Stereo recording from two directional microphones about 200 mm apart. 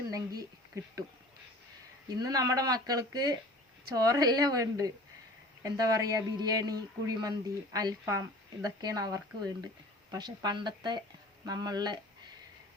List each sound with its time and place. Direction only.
0.1 s a sound: 20° right (ahead or behind)
0.7 s speech: 15° right (ahead or behind)
2.0 s speech: 20° right (ahead or behind)